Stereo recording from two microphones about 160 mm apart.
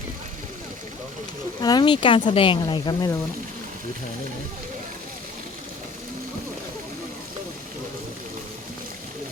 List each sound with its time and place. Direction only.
1.6 s speech: 25° left (ahead or behind)